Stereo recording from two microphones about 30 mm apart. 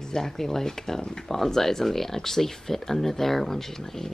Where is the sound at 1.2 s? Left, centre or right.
Centre.